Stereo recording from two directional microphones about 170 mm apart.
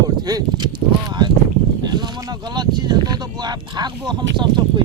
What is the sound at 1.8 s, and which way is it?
Speech, 25° right (ahead or behind).